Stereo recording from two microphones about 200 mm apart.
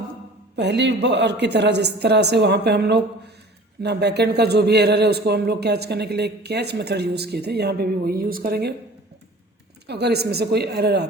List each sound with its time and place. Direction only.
0.5 s a man's voice: 60° right (ahead or behind)
9.8 s a man's voice: 55° right (ahead or behind)